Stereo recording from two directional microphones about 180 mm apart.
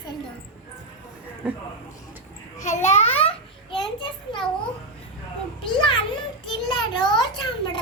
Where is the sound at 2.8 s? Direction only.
35° left (ahead or behind).